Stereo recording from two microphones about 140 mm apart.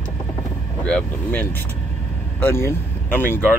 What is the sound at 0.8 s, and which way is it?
Speech, 10° left (ahead or behind).